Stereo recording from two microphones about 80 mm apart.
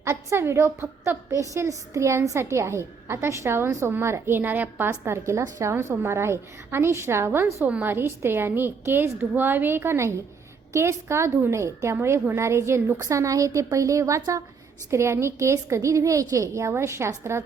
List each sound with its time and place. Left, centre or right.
0.0 s a woman's voice: right
4.9 s a woman's voice: right
5.7 s a woman's voice: right